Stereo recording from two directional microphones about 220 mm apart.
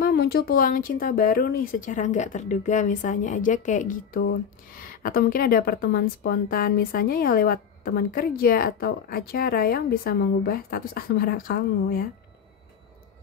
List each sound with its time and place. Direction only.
0.0 s speech: 45° left (ahead or behind)